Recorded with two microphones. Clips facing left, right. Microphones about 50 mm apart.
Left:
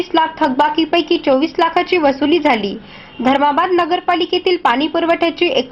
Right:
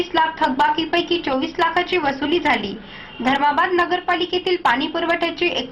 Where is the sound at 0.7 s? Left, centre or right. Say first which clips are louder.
Left 6 dB; left.